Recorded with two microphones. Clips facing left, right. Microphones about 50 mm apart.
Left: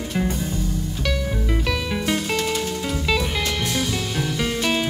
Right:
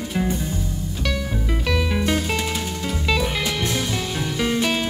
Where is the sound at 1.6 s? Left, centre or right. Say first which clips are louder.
Right 2 dB; centre.